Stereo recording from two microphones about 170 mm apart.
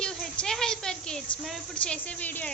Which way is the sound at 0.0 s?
5° left (ahead or behind).